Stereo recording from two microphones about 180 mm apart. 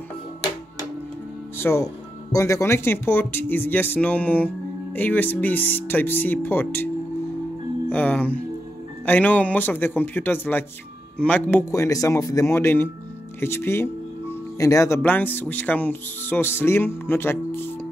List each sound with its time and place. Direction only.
1.6 s speech: 15° left (ahead or behind)
7.9 s speech: 10° left (ahead or behind)